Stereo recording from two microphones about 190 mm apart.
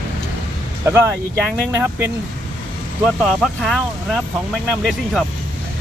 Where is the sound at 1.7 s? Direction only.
10° right (ahead or behind).